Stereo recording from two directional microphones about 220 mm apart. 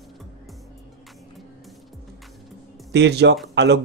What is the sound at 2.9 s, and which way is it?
Speech, 50° right (ahead or behind).